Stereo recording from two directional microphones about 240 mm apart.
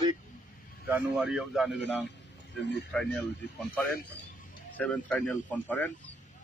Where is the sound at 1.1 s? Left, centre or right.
Centre.